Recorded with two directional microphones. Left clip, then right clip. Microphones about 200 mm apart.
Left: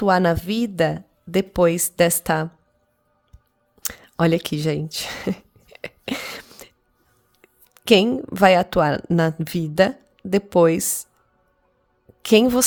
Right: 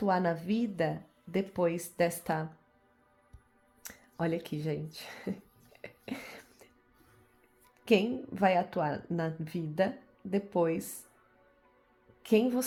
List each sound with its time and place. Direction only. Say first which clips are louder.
0.0 s a woman's voice: left 12 dB; 45° left (ahead or behind)
3.8 s a sound: left 14 dB; 50° left (ahead or behind)
7.7 s a woman's voice: left 12 dB; 50° left (ahead or behind)
12.2 s a woman's voice: left 12 dB; 50° left (ahead or behind)